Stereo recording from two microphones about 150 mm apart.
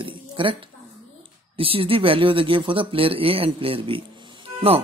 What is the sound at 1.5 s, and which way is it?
Speech, 40° right (ahead or behind).